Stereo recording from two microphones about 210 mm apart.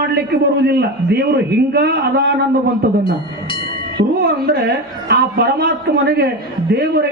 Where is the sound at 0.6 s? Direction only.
50° right (ahead or behind).